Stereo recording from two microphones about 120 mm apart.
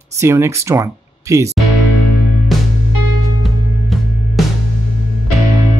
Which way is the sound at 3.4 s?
Centre (ahead or behind).